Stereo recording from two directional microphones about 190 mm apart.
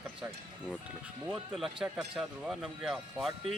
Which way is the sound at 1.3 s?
Centre (ahead or behind).